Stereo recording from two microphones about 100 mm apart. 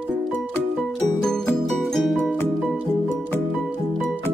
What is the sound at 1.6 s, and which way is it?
Music, 5° left (ahead or behind).